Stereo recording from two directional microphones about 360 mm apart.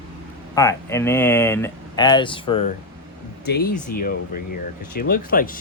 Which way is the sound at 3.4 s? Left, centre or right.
Left.